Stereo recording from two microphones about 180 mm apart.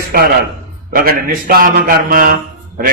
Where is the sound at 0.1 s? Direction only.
60° right (ahead or behind).